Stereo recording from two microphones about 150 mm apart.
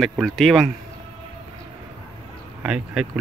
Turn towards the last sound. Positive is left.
turn(degrees=-5)  # may be behind; listen again after turning